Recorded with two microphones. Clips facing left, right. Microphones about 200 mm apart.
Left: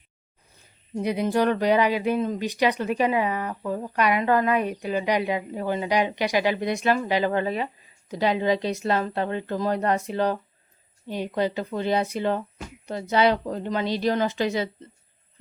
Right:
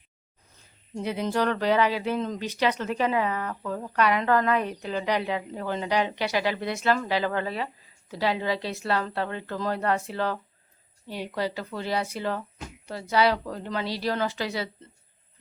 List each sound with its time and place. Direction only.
0.9 s a woman's voice: 15° left (ahead or behind)